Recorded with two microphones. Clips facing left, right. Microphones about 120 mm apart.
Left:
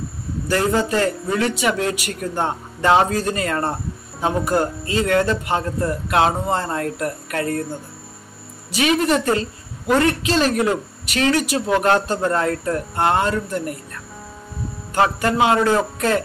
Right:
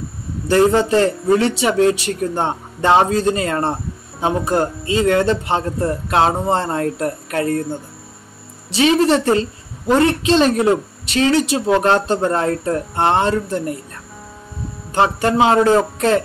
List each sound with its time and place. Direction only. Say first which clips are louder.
0.5 s a woman's voice: right 6 dB; 25° right (ahead or behind)
8.7 s a woman's voice: right 4 dB; 30° right (ahead or behind)
15.0 s a woman's voice: right 2 dB; 25° right (ahead or behind)